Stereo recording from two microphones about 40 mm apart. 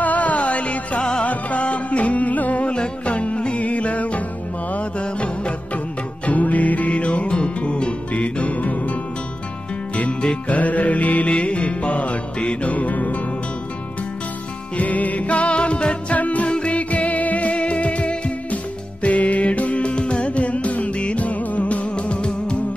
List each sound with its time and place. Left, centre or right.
0.0 s music: left
2.7 s music: left
6.2 s music: left
10.5 s music: left
12.7 s music: left
14.8 s music: left